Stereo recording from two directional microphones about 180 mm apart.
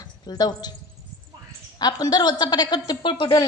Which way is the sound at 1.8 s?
20° left (ahead or behind).